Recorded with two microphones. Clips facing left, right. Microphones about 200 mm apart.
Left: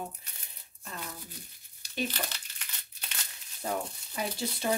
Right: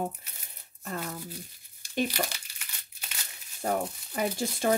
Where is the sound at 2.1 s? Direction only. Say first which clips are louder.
Right 5 dB; 10° right (ahead or behind).